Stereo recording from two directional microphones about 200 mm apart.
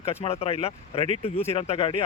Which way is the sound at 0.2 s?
30° left (ahead or behind).